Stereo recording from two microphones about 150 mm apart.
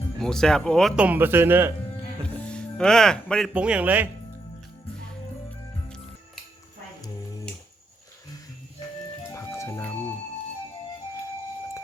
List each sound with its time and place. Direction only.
0.2 s speech: 5° left (ahead or behind)
0.9 s speech: 10° right (ahead or behind)
2.2 s music: 10° left (ahead or behind)
3.5 s speech: 10° right (ahead or behind)
9.3 s music: 20° left (ahead or behind)